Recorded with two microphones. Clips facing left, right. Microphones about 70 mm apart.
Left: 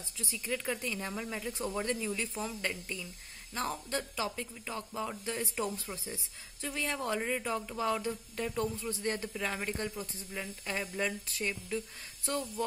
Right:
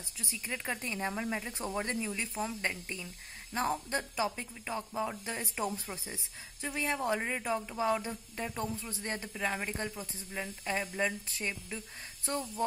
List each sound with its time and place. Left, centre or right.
0.2 s speech: right